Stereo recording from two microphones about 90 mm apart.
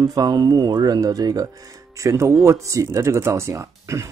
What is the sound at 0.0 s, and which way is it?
Speech, 45° right (ahead or behind).